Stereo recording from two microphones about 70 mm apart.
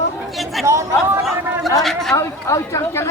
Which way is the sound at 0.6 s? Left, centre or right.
Right.